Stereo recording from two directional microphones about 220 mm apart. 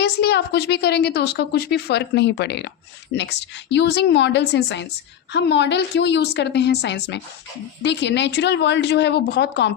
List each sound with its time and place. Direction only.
0.0 s a woman's voice: 50° left (ahead or behind)